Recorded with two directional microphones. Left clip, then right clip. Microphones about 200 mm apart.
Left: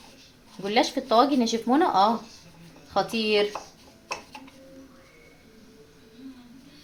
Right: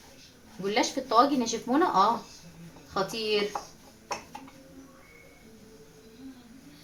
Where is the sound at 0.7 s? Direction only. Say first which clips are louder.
Left 3 dB; 35° left (ahead or behind).